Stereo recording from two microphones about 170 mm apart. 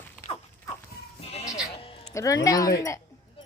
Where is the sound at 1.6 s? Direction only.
30° left (ahead or behind).